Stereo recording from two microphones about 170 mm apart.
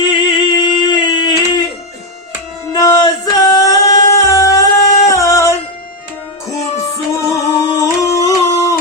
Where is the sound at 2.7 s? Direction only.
20° left (ahead or behind).